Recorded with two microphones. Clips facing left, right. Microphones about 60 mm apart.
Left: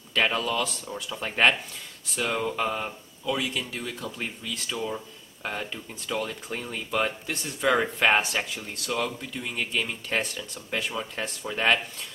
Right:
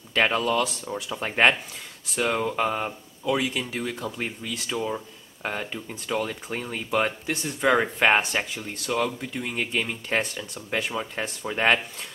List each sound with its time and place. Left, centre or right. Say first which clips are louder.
0.1 s speech: right 3 dB; centre
9.2 s speech: right 3 dB; centre